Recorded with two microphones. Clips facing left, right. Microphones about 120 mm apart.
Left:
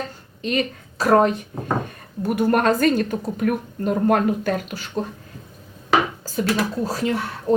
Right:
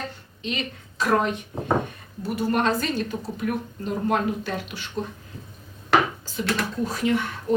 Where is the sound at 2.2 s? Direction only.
55° left (ahead or behind).